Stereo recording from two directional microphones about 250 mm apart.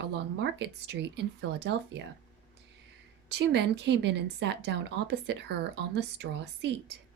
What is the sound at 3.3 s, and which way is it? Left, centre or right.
Speech, right.